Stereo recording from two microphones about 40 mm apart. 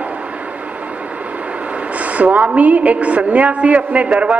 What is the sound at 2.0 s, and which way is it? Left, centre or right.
A woman's voice, right.